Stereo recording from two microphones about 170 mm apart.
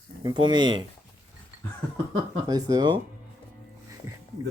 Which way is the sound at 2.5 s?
20° right (ahead or behind).